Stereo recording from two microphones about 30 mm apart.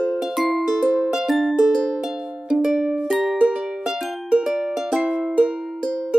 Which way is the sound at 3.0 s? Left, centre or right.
Centre.